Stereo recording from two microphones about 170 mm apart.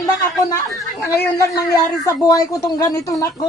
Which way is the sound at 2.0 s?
20° left (ahead or behind).